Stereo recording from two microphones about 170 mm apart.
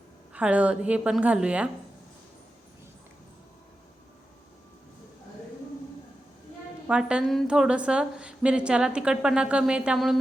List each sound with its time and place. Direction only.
0.3 s a woman's voice: 10° right (ahead or behind)
6.8 s a woman's voice: 5° right (ahead or behind)